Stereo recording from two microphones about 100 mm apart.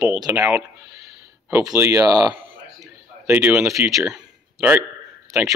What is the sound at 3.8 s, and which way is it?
Speech, 35° right (ahead or behind).